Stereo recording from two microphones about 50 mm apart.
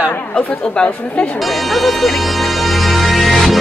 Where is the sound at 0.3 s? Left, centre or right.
Centre.